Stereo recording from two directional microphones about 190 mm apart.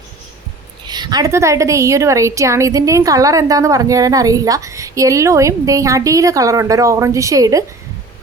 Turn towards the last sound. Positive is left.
turn(degrees=-15)  # may be behind; listen again after turning